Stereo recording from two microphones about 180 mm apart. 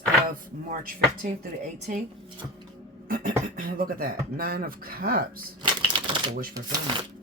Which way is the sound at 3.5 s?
50° right (ahead or behind).